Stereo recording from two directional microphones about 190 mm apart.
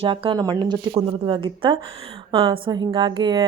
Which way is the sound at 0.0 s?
30° right (ahead or behind).